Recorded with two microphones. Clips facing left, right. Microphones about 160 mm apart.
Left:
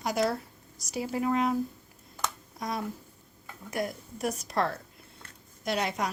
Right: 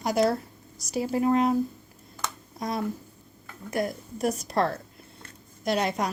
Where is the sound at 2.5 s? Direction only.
30° right (ahead or behind).